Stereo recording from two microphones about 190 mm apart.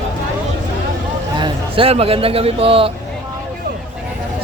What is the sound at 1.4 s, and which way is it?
Speech, 30° right (ahead or behind).